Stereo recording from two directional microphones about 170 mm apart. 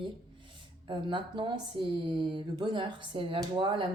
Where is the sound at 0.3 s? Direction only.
30° right (ahead or behind).